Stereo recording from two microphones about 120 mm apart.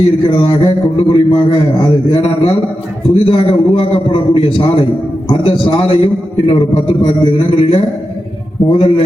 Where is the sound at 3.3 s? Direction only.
50° left (ahead or behind).